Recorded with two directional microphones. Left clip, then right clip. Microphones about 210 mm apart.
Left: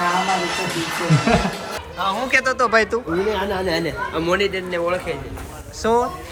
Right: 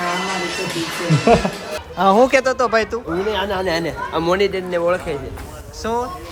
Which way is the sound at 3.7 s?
30° right (ahead or behind).